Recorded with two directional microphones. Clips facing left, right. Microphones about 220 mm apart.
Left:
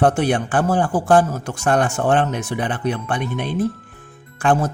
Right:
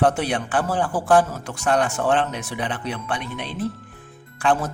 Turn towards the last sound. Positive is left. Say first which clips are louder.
# left 3 dB
turn(degrees=50)  # may be behind; listen again after turning